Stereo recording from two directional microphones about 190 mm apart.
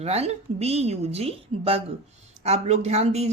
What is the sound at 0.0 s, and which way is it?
Speech, 35° right (ahead or behind).